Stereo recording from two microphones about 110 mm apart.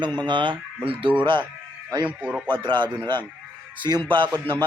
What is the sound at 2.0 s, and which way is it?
Speech, 10° right (ahead or behind).